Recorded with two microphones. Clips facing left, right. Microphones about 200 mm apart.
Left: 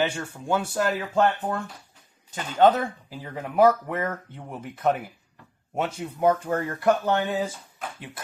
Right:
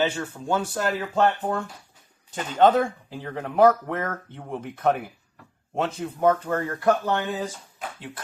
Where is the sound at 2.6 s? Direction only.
5° left (ahead or behind).